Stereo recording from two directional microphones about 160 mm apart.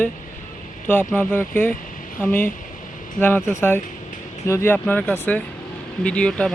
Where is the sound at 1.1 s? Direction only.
10° left (ahead or behind).